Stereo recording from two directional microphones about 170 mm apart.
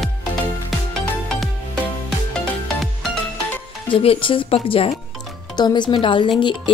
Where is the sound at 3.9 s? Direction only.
30° left (ahead or behind).